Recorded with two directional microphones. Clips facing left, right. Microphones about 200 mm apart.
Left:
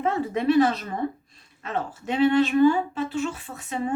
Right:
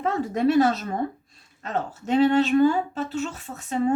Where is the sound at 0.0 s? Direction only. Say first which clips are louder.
Right 2 dB; 40° right (ahead or behind).